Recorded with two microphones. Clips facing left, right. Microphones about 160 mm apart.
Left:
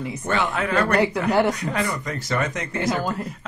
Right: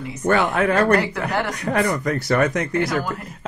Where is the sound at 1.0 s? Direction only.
20° left (ahead or behind).